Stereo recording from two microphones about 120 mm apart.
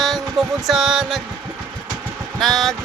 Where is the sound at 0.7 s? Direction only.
5° right (ahead or behind).